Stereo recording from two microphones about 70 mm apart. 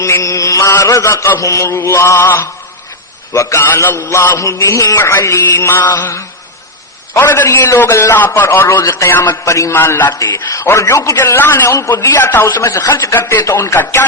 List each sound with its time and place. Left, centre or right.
0.0 s mantra: left
1.4 s a man's voice: left
3.3 s mantra: left
4.9 s a man's voice: left
5.9 s mantra: left
7.1 s a man's voice: left
9.4 s mantra: left
9.7 s a man's voice: left
11.2 s a man's voice: left
12.2 s a man's voice: left
12.5 s mantra: left
12.9 s a man's voice: left
13.4 s mantra: left